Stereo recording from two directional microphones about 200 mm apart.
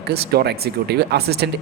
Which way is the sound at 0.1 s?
55° right (ahead or behind).